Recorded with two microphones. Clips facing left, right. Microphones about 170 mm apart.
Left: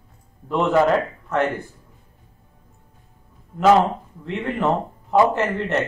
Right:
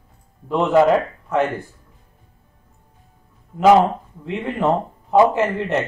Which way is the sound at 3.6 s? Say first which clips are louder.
Right 2 dB; 15° right (ahead or behind).